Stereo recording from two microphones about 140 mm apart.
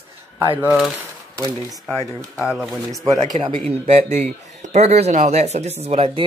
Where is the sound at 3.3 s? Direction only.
45° right (ahead or behind).